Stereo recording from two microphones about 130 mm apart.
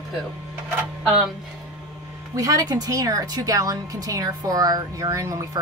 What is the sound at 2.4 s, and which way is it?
Speech, 30° right (ahead or behind).